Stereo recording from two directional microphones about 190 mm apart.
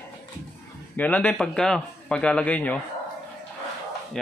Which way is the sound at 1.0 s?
10° left (ahead or behind).